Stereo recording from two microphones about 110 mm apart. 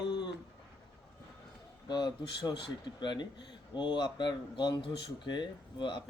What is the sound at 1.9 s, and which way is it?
A man's voice, 40° left (ahead or behind).